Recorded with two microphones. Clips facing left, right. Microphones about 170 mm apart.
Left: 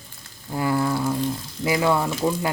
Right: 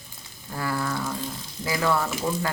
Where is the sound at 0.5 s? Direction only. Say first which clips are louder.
Left 6 dB; 20° left (ahead or behind).